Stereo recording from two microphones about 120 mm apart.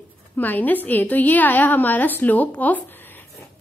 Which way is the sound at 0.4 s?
15° left (ahead or behind).